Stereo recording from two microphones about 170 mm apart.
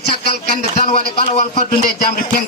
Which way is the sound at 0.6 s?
40° left (ahead or behind).